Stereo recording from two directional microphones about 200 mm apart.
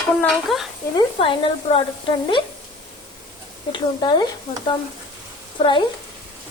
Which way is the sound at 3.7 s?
20° left (ahead or behind).